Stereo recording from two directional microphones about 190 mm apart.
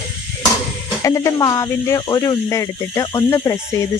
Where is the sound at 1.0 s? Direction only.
15° left (ahead or behind).